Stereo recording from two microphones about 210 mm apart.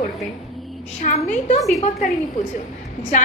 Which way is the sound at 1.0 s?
35° left (ahead or behind).